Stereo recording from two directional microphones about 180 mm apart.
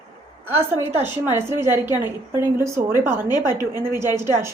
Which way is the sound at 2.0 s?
15° right (ahead or behind).